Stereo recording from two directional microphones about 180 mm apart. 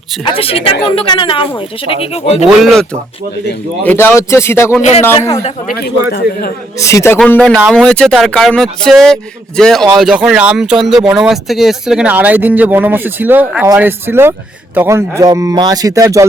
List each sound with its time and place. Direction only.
0.3 s speech: 30° left (ahead or behind)
3.8 s a man's voice: 10° left (ahead or behind)
4.8 s speech: 35° left (ahead or behind)
5.7 s a man's voice: 60° left (ahead or behind)
6.7 s a man's voice: 15° left (ahead or behind); by 16.2 s 15° right (ahead or behind)